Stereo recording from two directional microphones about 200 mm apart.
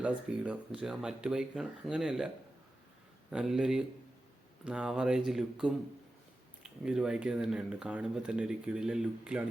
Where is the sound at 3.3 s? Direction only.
5° right (ahead or behind).